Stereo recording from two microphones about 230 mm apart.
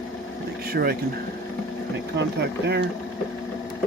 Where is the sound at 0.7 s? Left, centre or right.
Right.